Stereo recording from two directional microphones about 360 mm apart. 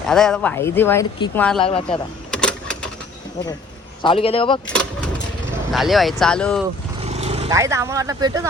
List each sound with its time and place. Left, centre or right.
0.1 s speech: centre
1.6 s a man's voice: centre
2.3 s a sound: centre
4.0 s a man's voice: centre
4.7 s speech: centre
7.0 s speech: centre